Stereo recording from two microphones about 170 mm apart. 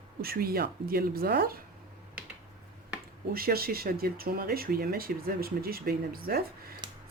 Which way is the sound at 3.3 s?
60° right (ahead or behind).